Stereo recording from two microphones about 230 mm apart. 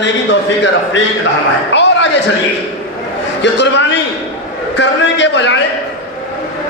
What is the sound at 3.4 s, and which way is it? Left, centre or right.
A man's voice, left.